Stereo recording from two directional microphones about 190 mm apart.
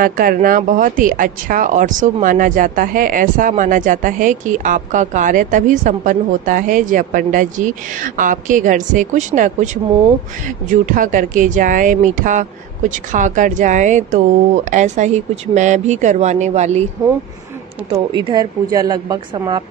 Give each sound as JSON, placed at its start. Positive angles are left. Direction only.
{"t": 0.0, "sound": "speech", "side_deg": -50}
{"t": 17.9, "sound": "a woman's voice", "side_deg": -25}